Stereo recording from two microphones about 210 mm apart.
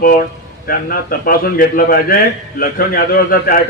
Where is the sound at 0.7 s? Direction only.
45° left (ahead or behind).